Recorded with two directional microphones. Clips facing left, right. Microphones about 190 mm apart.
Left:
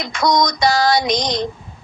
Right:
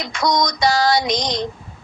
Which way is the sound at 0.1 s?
50° left (ahead or behind).